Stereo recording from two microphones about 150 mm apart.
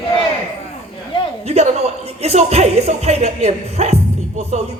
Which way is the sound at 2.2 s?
45° right (ahead or behind).